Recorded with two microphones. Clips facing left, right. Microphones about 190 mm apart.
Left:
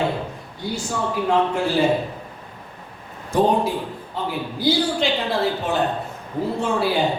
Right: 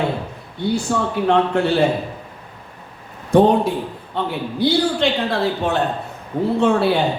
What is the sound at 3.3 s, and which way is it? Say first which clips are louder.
Speech: right 5 dB; 65° right (ahead or behind).